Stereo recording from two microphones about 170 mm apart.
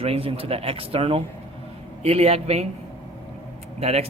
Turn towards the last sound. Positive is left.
turn(degrees=-40)  # may be behind; listen again after turning